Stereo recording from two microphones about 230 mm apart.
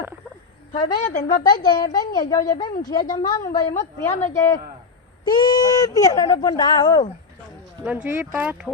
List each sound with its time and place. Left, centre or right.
0.7 s a woman's voice: left
1.6 s speech: centre
7.9 s speech: centre